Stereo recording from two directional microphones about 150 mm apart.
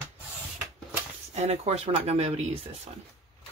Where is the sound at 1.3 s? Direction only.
45° right (ahead or behind).